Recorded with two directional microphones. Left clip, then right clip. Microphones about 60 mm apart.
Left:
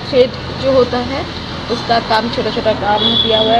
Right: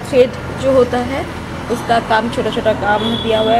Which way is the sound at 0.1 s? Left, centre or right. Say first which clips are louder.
Even; right.